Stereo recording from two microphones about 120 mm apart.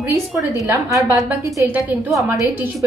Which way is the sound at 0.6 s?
25° right (ahead or behind).